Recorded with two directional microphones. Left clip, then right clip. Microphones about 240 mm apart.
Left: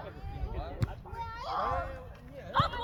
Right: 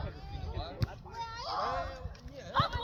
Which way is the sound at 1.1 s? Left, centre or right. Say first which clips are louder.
Even; right.